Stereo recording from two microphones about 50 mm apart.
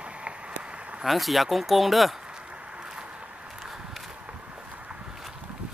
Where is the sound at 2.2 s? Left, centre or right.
Centre.